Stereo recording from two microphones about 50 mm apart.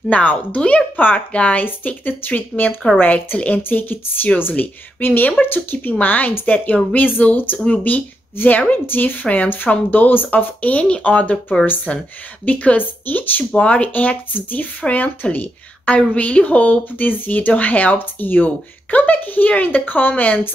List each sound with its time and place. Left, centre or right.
0.1 s speech: left
0.6 s speech: left
7.5 s speech: left